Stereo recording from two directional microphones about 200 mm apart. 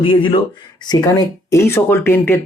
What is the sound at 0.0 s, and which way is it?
Speech, 25° left (ahead or behind).